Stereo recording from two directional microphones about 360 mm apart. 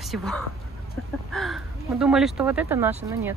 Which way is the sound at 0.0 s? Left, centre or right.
Centre.